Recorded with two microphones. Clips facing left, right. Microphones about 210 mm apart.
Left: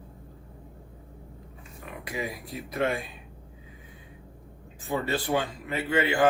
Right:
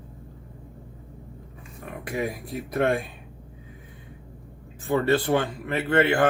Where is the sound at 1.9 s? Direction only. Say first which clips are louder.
Right 5 dB; 60° right (ahead or behind).